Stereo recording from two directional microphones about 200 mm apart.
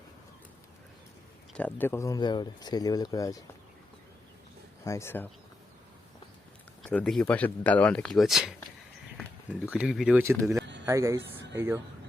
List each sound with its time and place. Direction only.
1.5 s speech: 10° left (ahead or behind)
4.9 s speech: 15° left (ahead or behind)
6.8 s speech: 5° left (ahead or behind)
9.1 s a sound: 5° left (ahead or behind)
9.7 s speech: 5° right (ahead or behind)